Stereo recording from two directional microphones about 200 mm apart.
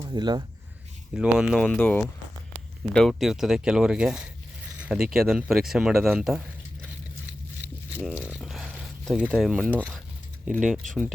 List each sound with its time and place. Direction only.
0.0 s speech: 20° right (ahead or behind)
1.1 s speech: 5° right (ahead or behind)
7.6 s a sound: 5° right (ahead or behind)
9.7 s speech: 10° right (ahead or behind)